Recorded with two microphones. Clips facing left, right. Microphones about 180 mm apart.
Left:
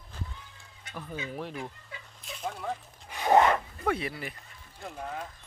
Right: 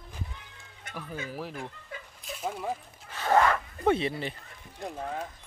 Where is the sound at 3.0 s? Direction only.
15° left (ahead or behind).